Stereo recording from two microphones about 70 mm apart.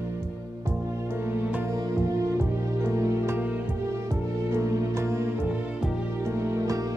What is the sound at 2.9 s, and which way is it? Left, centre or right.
Music, right.